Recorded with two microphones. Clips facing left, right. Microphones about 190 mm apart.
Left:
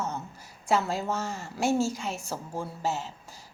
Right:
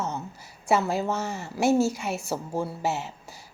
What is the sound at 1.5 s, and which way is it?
Speech, 5° right (ahead or behind).